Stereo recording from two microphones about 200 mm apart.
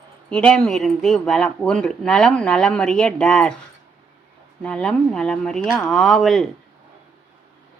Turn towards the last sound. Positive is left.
turn(degrees=0)  # may be behind; listen again after turning